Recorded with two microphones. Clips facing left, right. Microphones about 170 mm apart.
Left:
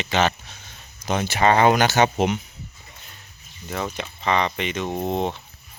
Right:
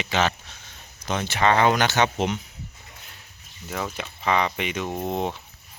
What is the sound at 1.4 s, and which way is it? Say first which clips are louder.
Speech: left 2 dB; 40° left (ahead or behind).